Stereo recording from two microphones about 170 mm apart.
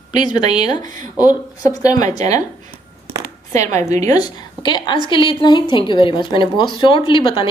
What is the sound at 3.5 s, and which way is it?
Speech, 45° right (ahead or behind).